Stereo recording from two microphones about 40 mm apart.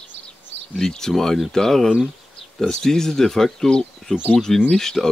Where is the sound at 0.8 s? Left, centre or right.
Centre.